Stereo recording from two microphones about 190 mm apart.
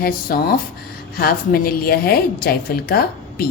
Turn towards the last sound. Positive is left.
turn(degrees=55)  # may be behind; listen again after turning